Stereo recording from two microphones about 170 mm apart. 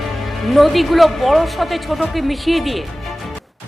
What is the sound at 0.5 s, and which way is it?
A woman's voice, centre (ahead or behind).